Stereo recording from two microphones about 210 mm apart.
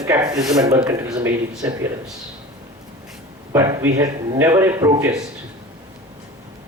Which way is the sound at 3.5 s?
15° right (ahead or behind).